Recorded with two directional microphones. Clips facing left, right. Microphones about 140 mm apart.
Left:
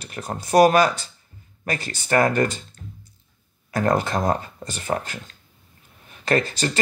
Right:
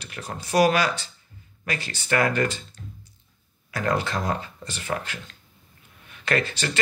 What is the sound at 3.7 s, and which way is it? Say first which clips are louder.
Speech: left 4 dB; 45° left (ahead or behind).